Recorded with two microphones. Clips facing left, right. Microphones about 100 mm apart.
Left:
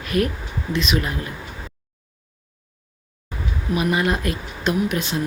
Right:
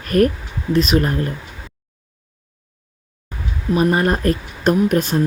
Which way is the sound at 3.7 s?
40° right (ahead or behind).